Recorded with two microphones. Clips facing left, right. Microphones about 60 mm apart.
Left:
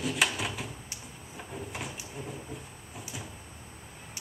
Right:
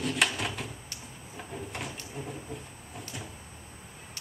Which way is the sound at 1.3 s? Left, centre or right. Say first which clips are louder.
Right 1 dB; centre.